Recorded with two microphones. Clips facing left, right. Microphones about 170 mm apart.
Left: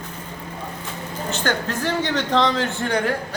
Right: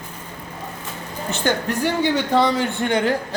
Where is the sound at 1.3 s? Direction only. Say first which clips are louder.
Right 3 dB; 15° right (ahead or behind).